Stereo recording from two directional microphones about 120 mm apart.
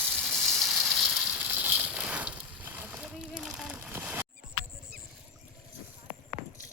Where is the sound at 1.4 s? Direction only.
15° right (ahead or behind).